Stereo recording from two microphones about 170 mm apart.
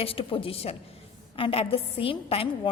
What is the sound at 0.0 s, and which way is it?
A woman's voice, 35° left (ahead or behind).